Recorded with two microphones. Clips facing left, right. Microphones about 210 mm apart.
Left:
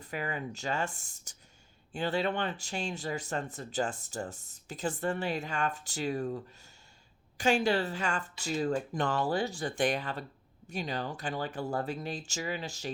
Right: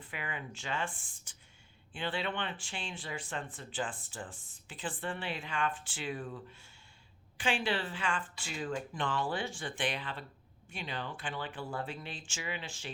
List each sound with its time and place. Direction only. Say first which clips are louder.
0.0 s speech: left 6 dB; 40° left (ahead or behind)